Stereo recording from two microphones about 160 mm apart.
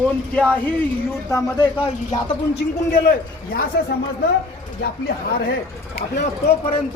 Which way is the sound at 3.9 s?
80° left.